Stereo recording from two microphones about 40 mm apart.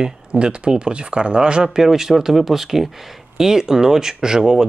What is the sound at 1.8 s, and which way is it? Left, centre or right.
Speech, centre.